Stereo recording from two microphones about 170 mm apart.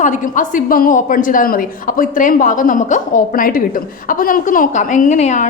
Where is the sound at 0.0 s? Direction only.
50° left (ahead or behind).